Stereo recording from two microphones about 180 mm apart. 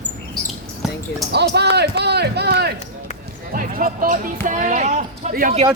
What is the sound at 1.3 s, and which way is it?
A man's voice, 70° right (ahead or behind).